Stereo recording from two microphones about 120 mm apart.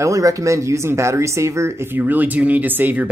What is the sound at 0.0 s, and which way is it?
Speech, 25° right (ahead or behind).